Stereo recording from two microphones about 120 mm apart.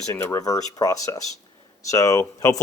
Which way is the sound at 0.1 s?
20° left (ahead or behind).